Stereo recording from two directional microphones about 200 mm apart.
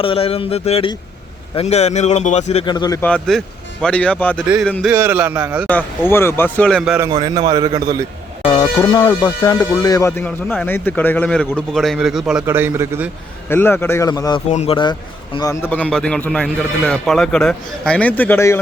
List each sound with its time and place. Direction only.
0.0 s speech: 25° left (ahead or behind)
2.6 s speech: 20° left (ahead or behind)
3.1 s a man's voice: 5° left (ahead or behind)
4.4 s a man's voice: 5° right (ahead or behind)
5.6 s speech: 10° left (ahead or behind)
6.9 s a man's voice: 20° right (ahead or behind)
8.4 s a man's voice: 20° left (ahead or behind); by 13.1 s 10° right (ahead or behind)
13.5 s speech: 10° left (ahead or behind)
14.5 s speech: 30° left (ahead or behind)
15.4 s a man's voice: 15° left (ahead or behind)